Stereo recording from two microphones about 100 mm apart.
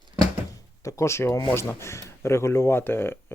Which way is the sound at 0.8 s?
30° left (ahead or behind).